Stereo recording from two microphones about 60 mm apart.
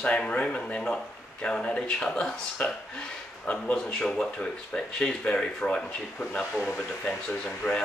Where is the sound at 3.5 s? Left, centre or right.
Left.